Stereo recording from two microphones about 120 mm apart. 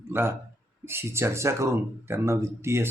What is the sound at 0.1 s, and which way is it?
Speech, 20° right (ahead or behind).